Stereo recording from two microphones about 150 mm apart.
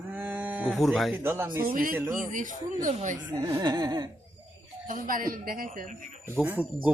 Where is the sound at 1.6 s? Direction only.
70° right (ahead or behind).